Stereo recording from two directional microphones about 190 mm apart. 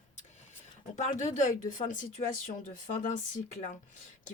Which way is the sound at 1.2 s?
40° left (ahead or behind).